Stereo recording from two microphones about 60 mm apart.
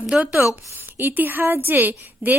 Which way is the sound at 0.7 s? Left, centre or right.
Right.